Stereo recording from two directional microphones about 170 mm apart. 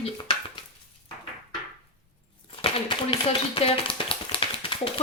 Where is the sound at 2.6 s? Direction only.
30° left (ahead or behind).